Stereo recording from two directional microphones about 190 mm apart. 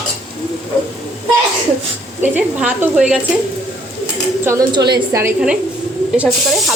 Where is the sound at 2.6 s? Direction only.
5° right (ahead or behind).